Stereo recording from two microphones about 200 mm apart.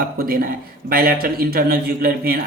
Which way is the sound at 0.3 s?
45° right (ahead or behind).